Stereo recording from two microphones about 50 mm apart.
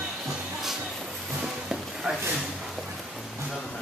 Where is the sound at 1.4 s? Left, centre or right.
Centre.